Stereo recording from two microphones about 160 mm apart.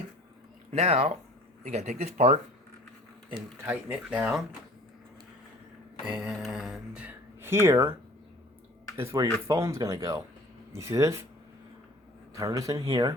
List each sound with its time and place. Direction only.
0.7 s speech: 40° right (ahead or behind)
3.6 s speech: 10° right (ahead or behind)
6.1 s a sound: 5° right (ahead or behind)
9.0 s speech: 15° right (ahead or behind)
12.3 s speech: 20° right (ahead or behind)